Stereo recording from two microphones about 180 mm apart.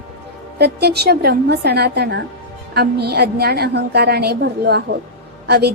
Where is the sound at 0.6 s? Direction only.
65° right (ahead or behind).